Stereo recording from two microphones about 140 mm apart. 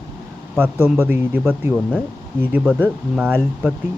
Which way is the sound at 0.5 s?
15° right (ahead or behind).